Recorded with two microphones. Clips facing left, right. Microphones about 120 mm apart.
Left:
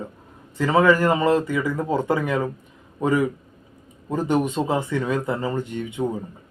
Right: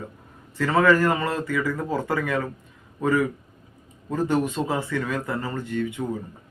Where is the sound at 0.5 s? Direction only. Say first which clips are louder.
Left 2 dB; 15° left (ahead or behind).